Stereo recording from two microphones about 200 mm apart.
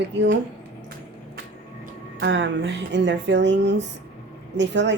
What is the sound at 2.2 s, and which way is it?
Speech, 65° right (ahead or behind).